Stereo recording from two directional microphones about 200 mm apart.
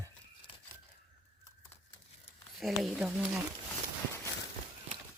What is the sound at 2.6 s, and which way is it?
Speech, centre (ahead or behind).